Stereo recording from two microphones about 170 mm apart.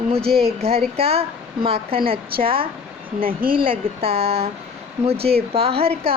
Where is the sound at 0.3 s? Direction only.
35° right (ahead or behind).